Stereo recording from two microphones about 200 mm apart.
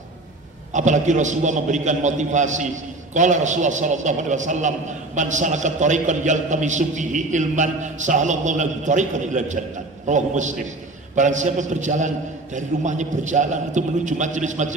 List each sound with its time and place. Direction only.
0.7 s a man's voice: 35° right (ahead or behind)